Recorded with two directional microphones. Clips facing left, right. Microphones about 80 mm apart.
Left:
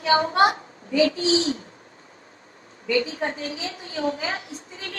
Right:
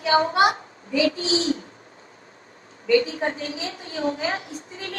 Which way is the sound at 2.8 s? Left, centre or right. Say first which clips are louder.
Right 4 dB; right.